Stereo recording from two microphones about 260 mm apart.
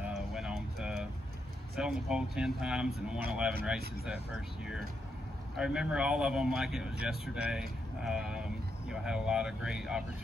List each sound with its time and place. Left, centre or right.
0.0 s a sound: centre
1.8 s speech: centre
5.6 s speech: centre